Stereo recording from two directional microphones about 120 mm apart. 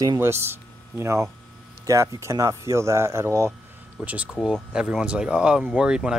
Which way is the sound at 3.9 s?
10° right (ahead or behind).